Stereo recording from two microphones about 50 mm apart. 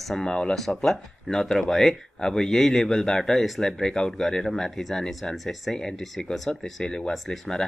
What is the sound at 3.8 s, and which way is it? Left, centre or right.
Speech, centre.